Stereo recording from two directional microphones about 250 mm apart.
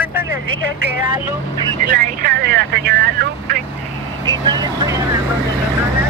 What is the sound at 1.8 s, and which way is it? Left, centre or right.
Speech, right.